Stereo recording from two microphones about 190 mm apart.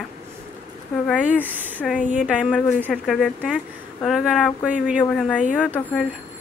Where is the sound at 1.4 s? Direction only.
10° right (ahead or behind).